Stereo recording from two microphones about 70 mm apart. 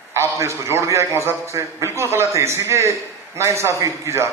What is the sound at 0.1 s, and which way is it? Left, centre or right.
A man's voice, right.